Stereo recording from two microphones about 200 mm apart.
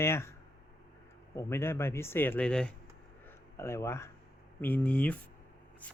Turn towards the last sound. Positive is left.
turn(degrees=5)  # may be behind; listen again after turning